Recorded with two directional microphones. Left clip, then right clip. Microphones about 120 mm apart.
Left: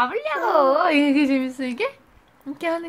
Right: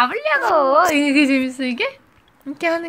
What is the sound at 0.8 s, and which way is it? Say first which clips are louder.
A woman's voice: right 3 dB; 25° right (ahead or behind).